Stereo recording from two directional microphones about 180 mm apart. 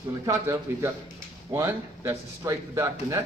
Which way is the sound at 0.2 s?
20° right (ahead or behind).